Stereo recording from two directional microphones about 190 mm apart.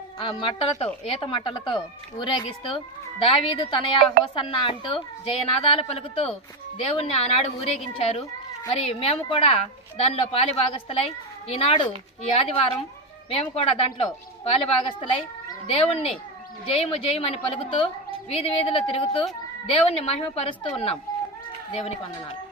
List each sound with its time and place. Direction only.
0.2 s a woman's voice: 30° left (ahead or behind)